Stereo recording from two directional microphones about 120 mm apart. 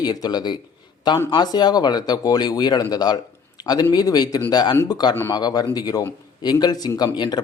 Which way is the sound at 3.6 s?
35° left (ahead or behind).